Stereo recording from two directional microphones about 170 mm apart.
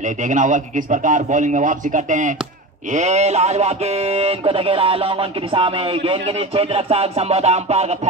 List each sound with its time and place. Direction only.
0.3 s a man's voice: 50° right (ahead or behind)